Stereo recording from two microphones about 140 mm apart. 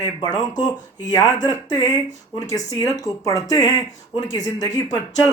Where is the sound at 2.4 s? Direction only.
25° left (ahead or behind).